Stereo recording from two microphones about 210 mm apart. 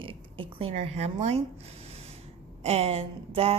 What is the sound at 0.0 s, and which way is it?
A woman's voice, 25° right (ahead or behind).